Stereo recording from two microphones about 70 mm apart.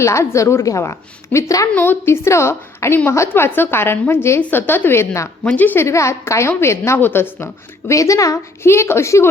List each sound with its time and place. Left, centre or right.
0.0 s a woman's voice: left
1.7 s a woman's voice: left
2.2 s a woman's voice: left
5.5 s a woman's voice: left
5.8 s a woman's voice: left
7.4 s a woman's voice: left
8.6 s a woman's voice: left